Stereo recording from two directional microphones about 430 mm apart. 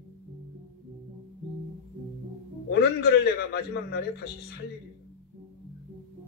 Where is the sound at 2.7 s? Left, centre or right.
Left.